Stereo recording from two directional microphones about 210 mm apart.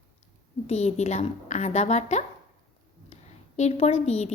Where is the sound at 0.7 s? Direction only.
30° left (ahead or behind).